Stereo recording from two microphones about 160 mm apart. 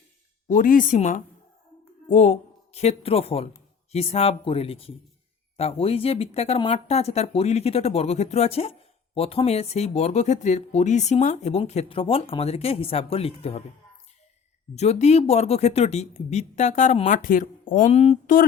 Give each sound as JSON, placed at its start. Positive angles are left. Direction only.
{"t": 0.4, "sound": "speech", "side_deg": 55}
{"t": 14.8, "sound": "speech", "side_deg": 45}